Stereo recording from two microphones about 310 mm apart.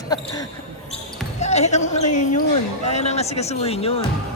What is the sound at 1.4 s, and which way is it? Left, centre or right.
Speech, left.